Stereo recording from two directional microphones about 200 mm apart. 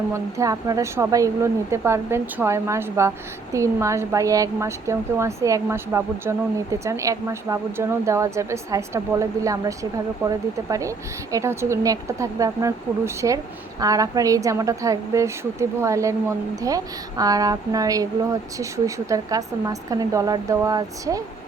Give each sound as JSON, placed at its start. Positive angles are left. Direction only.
{"t": 0.1, "sound": "a woman's voice", "side_deg": -15}